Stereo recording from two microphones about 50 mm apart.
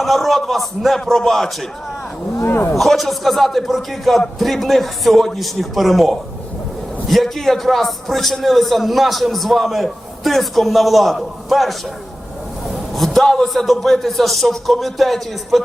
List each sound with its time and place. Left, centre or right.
0.0 s a man's voice: centre
2.4 s a man's voice: left
2.7 s a man's voice: centre
13.0 s a man's voice: centre